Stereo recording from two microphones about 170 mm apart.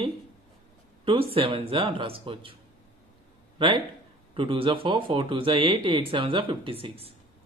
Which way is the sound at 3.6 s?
30° right (ahead or behind).